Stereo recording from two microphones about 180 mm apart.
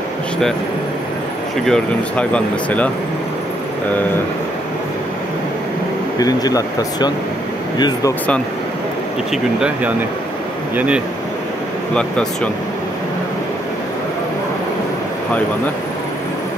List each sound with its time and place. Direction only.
1.7 s speech: 5° left (ahead or behind)
6.1 s speech: 20° left (ahead or behind)
9.3 s speech: 5° right (ahead or behind)
11.9 s speech: 5° left (ahead or behind)